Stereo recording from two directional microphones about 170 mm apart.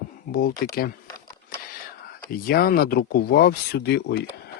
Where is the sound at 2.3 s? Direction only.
60° left (ahead or behind).